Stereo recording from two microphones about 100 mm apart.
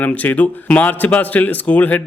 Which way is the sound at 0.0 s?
15° left (ahead or behind).